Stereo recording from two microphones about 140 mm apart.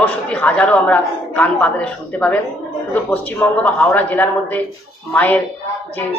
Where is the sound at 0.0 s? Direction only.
10° left (ahead or behind).